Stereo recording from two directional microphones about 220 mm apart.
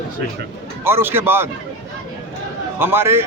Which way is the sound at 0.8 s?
10° right (ahead or behind).